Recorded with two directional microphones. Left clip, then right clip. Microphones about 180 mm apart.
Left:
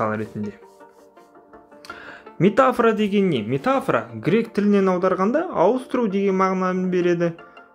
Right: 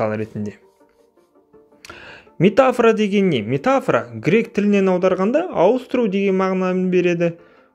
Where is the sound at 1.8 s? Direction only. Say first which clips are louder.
Even; 35° right (ahead or behind).